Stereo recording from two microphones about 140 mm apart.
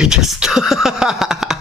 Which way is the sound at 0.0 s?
5° right (ahead or behind).